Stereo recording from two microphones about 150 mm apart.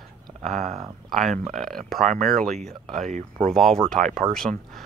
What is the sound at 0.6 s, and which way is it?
Speech, 55° right (ahead or behind).